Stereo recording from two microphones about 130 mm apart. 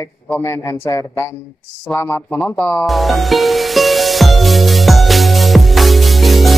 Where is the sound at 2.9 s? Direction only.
Centre (ahead or behind).